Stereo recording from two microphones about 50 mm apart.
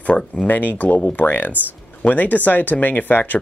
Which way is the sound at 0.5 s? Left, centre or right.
Left.